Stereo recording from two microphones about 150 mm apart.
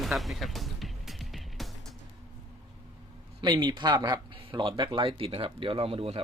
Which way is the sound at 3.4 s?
30° right (ahead or behind).